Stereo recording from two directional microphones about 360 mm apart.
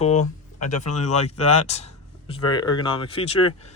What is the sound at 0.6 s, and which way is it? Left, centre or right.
Speech, left.